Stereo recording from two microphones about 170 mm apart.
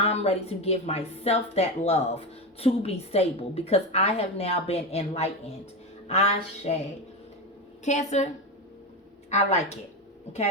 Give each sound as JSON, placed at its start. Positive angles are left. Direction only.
{"t": 0.0, "sound": "a woman's voice", "side_deg": 35}
{"t": 7.9, "sound": "a woman's voice", "side_deg": 45}
{"t": 9.3, "sound": "a woman's voice", "side_deg": 40}